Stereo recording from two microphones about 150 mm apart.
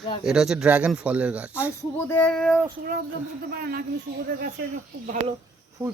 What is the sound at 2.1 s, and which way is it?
Speech, 5° left (ahead or behind).